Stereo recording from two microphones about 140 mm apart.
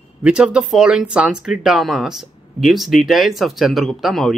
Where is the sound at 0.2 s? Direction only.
5° right (ahead or behind).